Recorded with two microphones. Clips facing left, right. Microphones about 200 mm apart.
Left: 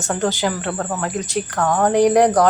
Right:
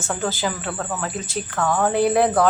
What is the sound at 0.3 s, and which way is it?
A woman's voice, 15° left (ahead or behind).